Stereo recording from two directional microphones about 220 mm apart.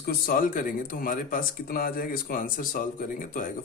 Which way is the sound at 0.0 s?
40° left (ahead or behind).